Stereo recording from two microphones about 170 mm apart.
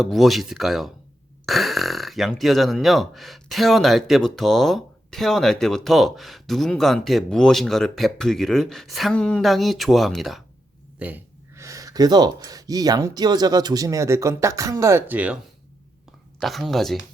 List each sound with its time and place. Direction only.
0.0 s speech: centre (ahead or behind)
11.0 s speech: 15° right (ahead or behind)
16.4 s speech: centre (ahead or behind)